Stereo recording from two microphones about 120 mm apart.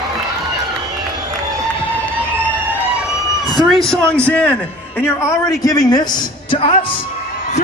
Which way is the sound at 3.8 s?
5° left (ahead or behind).